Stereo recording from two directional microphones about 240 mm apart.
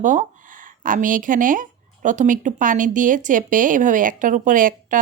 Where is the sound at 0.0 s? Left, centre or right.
Right.